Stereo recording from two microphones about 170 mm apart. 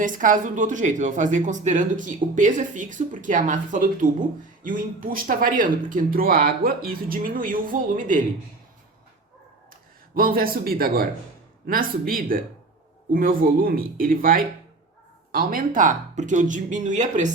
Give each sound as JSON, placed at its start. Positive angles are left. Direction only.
{"t": 0.0, "sound": "speech", "side_deg": -50}
{"t": 10.2, "sound": "speech", "side_deg": -60}